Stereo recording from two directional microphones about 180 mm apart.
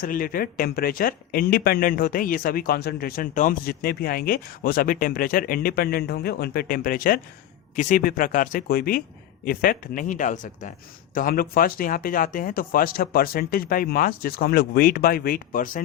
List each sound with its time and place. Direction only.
0.0 s speech: 50° left (ahead or behind)